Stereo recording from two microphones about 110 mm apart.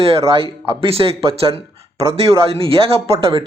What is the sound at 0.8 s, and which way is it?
Speech, 60° right (ahead or behind).